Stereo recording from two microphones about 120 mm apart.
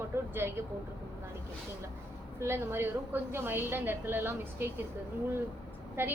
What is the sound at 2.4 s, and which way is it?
A woman's voice, 20° right (ahead or behind).